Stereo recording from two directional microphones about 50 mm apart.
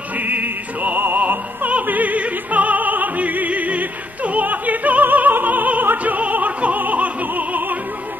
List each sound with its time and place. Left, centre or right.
0.2 s opera: right